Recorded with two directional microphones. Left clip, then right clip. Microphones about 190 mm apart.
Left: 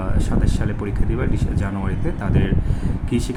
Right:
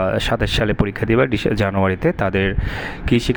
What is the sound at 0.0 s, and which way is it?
Speech, 40° right (ahead or behind).